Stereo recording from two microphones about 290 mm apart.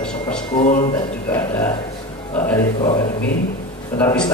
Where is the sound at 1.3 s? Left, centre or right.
Centre.